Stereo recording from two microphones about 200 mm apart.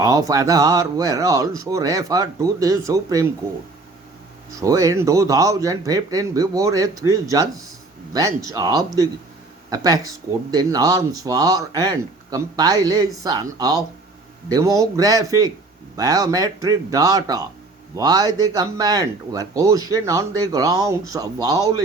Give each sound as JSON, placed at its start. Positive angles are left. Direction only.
{"t": 0.0, "sound": "speech", "side_deg": -20}
{"t": 4.6, "sound": "speech", "side_deg": -15}